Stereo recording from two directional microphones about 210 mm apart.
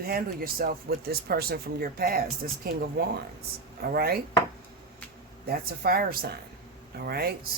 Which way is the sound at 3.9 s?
45° right (ahead or behind).